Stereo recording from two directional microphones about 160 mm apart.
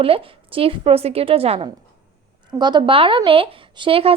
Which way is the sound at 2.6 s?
25° right (ahead or behind).